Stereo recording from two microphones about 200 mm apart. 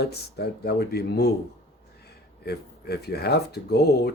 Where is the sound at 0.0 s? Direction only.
55° left (ahead or behind).